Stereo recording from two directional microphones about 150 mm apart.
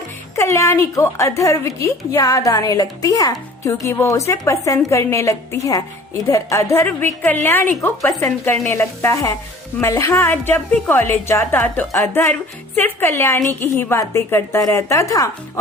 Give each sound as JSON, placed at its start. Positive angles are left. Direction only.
{"t": 0.3, "sound": "a woman's voice", "side_deg": 20}